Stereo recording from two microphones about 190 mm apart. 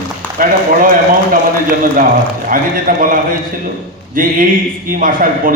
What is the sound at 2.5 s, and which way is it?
Speech, 45° right (ahead or behind).